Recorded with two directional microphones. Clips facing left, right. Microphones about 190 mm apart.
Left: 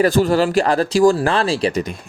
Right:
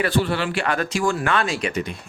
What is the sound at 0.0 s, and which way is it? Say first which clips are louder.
Speech: left 7 dB; 40° left (ahead or behind).